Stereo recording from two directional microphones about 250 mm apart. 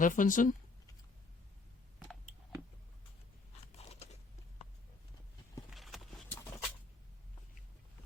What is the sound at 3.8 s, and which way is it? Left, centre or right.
Crunch, left.